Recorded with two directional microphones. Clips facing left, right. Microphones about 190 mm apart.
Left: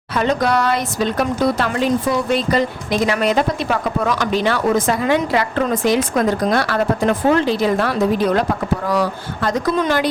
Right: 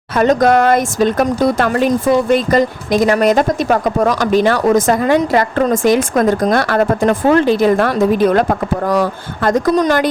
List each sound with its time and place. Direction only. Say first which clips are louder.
0.2 s speech: right 6 dB; 45° right (ahead or behind)